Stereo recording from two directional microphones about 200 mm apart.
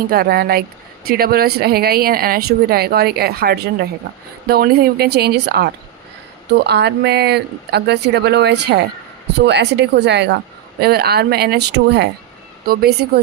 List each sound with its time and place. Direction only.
0.1 s speech: 50° right (ahead or behind)